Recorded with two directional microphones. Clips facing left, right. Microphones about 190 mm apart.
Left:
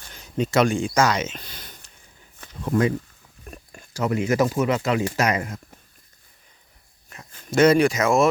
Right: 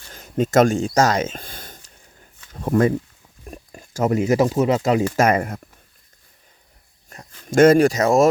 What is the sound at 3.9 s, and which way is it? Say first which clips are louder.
Speech: right 4 dB; 45° right (ahead or behind).